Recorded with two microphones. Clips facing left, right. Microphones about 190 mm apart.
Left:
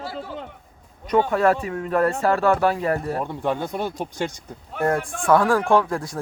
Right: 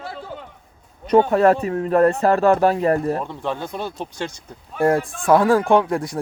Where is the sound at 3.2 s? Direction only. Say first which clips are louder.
Left 2 dB; 15° left (ahead or behind).